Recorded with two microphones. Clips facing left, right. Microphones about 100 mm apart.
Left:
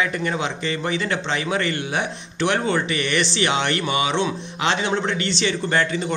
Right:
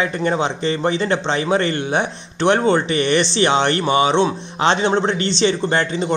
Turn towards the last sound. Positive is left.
turn(degrees=-25)  # may be behind; listen again after turning